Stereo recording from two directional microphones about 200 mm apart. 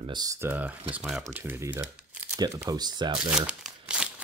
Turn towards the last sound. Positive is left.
turn(degrees=-5)  # may be behind; listen again after turning